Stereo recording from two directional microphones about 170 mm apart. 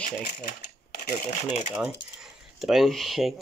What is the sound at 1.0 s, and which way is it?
Speech, 50° left (ahead or behind).